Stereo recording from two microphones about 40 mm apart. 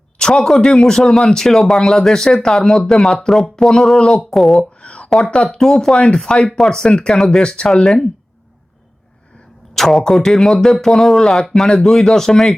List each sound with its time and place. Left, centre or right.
0.2 s speech: centre
2.6 s speech: centre
4.8 s a sound: left
5.2 s speech: centre
7.4 s speech: left
7.7 s speech: centre
9.7 s speech: centre